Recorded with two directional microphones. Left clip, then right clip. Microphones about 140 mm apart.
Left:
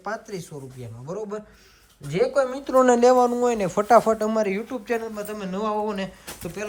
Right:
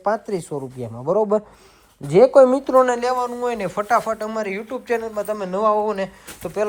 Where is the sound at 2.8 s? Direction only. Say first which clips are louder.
Left 4 dB; 40° left (ahead or behind).